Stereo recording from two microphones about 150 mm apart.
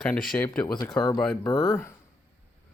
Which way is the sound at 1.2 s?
5° left (ahead or behind).